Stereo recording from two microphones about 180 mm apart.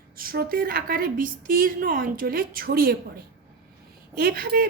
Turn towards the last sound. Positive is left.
turn(degrees=-55)  # may be behind; listen again after turning